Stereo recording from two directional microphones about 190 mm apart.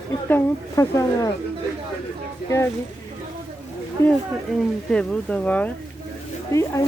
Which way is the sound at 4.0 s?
15° left (ahead or behind).